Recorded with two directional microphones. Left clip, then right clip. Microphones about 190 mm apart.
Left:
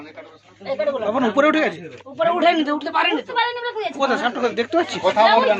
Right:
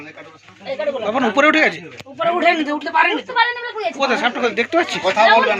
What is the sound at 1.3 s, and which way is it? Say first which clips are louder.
Speech: right 5 dB; 5° left (ahead or behind).